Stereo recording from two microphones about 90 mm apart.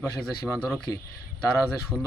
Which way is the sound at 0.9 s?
40° left (ahead or behind).